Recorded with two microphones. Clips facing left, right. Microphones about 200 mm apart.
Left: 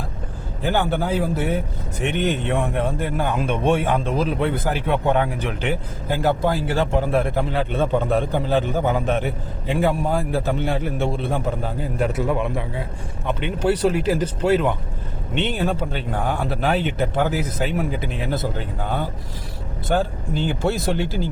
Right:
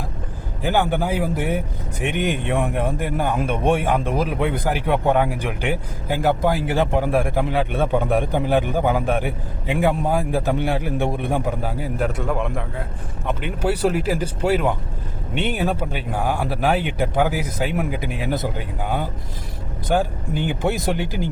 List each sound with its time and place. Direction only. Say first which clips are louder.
0.6 s a man's voice: right 1 dB; 15° right (ahead or behind)